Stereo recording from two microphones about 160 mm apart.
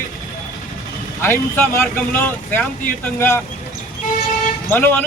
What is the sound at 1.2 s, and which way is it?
Speech, 10° left (ahead or behind).